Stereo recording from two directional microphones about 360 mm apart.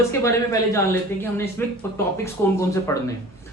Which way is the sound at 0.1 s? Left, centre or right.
Centre.